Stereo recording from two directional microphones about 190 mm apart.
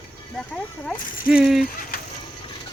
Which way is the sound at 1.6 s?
50° left (ahead or behind).